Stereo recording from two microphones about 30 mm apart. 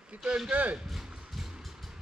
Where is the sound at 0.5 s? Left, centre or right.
Right.